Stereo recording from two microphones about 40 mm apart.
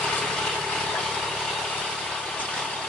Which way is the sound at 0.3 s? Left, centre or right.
Centre.